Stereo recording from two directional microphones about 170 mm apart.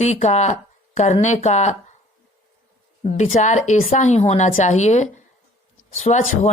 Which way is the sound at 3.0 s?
40° left (ahead or behind).